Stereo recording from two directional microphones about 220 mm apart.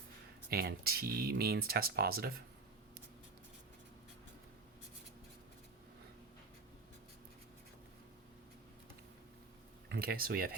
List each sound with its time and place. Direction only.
0.5 s speech: 45° right (ahead or behind)
9.9 s speech: 45° right (ahead or behind)